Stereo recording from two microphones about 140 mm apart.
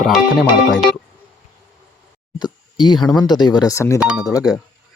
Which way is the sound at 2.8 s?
30° left (ahead or behind).